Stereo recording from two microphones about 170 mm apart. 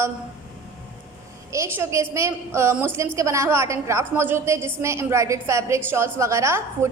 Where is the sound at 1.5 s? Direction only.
15° right (ahead or behind).